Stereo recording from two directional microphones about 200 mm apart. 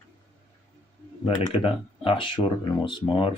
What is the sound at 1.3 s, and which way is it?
Speech, 25° left (ahead or behind).